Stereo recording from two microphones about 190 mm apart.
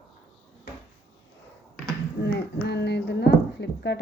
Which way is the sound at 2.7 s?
60° left (ahead or behind).